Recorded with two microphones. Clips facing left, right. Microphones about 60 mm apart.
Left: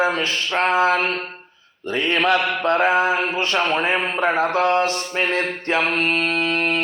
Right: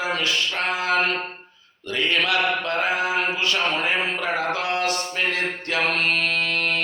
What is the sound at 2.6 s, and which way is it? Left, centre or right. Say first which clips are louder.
A man's voice: left 6 dB; left.